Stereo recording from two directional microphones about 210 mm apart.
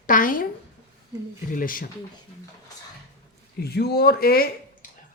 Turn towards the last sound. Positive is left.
turn(degrees=45)  # may be behind; listen again after turning